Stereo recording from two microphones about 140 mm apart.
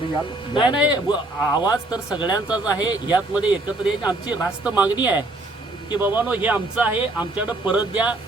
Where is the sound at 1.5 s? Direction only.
30° left (ahead or behind).